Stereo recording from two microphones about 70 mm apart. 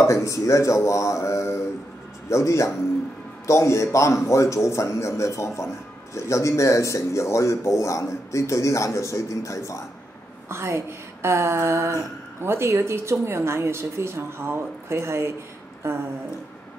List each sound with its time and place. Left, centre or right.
0.0 s speech: left
10.5 s a woman's voice: right